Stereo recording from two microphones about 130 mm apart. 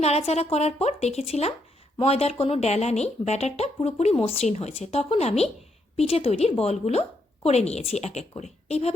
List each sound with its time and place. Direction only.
0.0 s a woman's voice: 55° left (ahead or behind)